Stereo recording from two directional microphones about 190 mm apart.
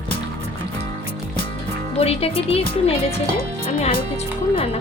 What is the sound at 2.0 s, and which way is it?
Speech, 30° left (ahead or behind).